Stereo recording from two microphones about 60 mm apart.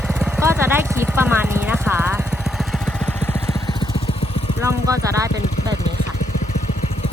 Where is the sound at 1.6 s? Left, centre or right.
Right.